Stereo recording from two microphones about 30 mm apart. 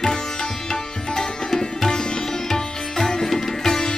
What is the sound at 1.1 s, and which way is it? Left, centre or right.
Music, centre.